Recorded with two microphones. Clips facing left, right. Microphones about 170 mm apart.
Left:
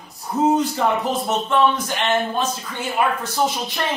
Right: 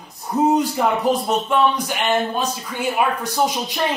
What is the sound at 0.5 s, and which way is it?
Speech, 10° right (ahead or behind).